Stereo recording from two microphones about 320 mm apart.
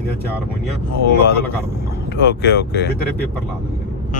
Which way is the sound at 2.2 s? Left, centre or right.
Left.